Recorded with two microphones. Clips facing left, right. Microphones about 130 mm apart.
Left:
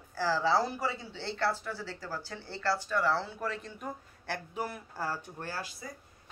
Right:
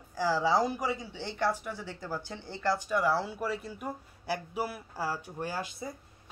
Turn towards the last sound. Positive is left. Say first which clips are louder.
# right 4 dB
turn(degrees=-25)  # may be behind; listen again after turning